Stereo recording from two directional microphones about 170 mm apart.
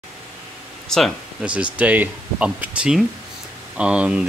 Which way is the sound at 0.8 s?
5° left (ahead or behind).